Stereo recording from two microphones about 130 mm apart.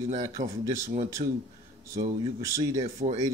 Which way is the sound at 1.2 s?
65° right (ahead or behind).